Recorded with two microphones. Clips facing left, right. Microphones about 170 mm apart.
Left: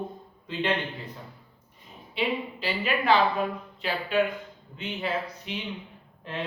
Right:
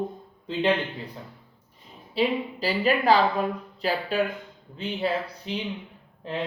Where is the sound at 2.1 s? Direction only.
35° right (ahead or behind).